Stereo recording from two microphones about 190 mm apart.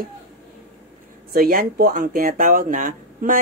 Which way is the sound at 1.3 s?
50° right (ahead or behind).